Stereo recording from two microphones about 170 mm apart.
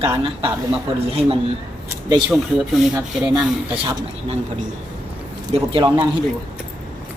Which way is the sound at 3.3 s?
35° right (ahead or behind).